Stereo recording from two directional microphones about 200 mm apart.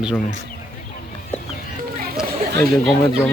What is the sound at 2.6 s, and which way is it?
Speech, 10° left (ahead or behind).